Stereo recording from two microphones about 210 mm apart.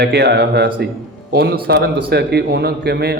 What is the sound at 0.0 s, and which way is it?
A man's voice, 50° right (ahead or behind).